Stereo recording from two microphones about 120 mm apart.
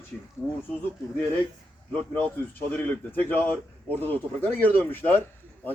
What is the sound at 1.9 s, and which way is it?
Speech, 10° left (ahead or behind).